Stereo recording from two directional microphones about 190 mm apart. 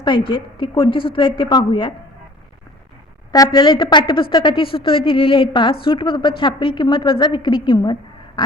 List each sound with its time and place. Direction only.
0.3 s a woman's voice: 25° left (ahead or behind)
3.3 s a woman's voice: 20° left (ahead or behind)
8.4 s duck: 25° left (ahead or behind)